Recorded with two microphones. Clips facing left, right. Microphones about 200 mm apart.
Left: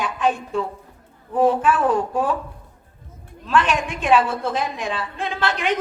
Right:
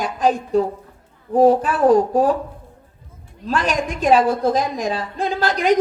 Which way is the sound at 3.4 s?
40° right (ahead or behind).